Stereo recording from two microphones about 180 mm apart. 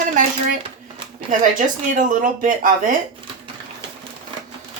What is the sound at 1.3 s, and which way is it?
Speech, 45° right (ahead or behind).